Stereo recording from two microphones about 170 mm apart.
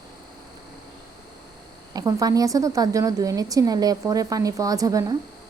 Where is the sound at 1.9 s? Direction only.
20° right (ahead or behind).